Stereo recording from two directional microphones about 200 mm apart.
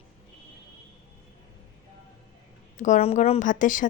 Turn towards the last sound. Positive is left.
turn(degrees=40)  # may be behind; listen again after turning